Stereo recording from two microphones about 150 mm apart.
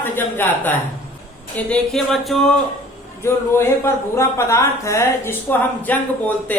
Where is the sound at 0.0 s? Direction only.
15° left (ahead or behind).